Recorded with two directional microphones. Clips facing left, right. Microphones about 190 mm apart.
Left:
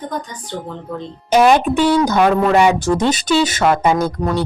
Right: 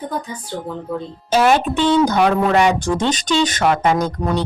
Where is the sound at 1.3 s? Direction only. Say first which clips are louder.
Left 3 dB; 15° left (ahead or behind).